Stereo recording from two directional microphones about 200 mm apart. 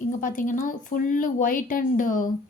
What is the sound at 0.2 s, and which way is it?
A woman's voice, 40° left (ahead or behind).